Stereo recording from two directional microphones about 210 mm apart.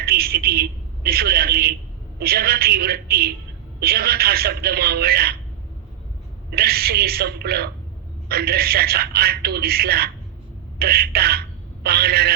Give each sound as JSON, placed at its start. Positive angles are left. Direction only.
{"t": 0.0, "sound": "a sound", "side_deg": -45}
{"t": 2.1, "sound": "speech", "side_deg": -45}
{"t": 6.5, "sound": "a man's voice", "side_deg": -45}